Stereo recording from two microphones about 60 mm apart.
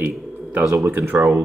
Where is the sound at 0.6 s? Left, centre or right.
Right.